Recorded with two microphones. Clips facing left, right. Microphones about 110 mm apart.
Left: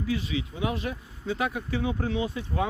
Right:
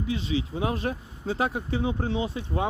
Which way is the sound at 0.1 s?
25° right (ahead or behind).